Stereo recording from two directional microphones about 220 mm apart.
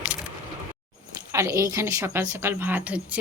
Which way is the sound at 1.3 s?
15° right (ahead or behind).